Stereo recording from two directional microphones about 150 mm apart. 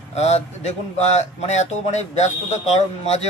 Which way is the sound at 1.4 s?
50° left (ahead or behind).